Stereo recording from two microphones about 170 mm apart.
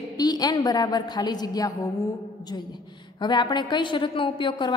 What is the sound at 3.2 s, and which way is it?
A woman's voice, 25° left (ahead or behind).